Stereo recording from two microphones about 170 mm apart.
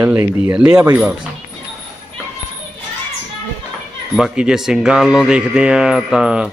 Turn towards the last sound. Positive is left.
turn(degrees=-5)  # may be behind; listen again after turning